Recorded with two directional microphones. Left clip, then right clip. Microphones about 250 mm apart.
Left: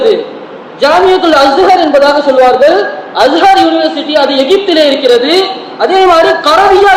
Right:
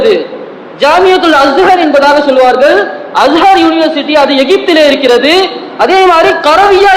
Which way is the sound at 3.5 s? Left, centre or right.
Centre.